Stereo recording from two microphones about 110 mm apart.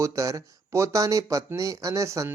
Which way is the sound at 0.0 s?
30° right (ahead or behind).